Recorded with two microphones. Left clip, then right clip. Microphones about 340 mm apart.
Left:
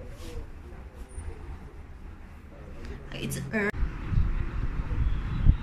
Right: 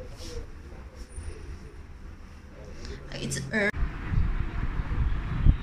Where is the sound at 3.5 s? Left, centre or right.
Centre.